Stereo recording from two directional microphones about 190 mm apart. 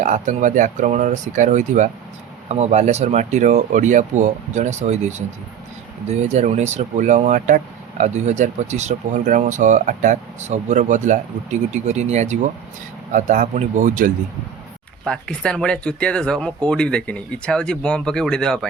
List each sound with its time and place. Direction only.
0.0 s speech: 40° right (ahead or behind)
15.0 s speech: 5° left (ahead or behind)